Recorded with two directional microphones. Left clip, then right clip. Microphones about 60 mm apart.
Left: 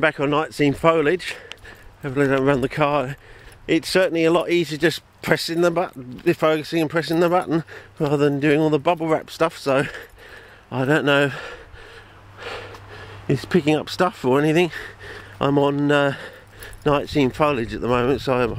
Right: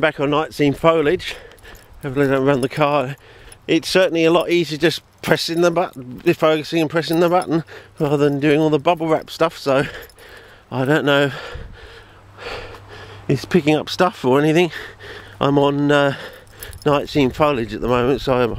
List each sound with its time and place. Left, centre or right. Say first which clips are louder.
0.0 s speech: right 2 dB; right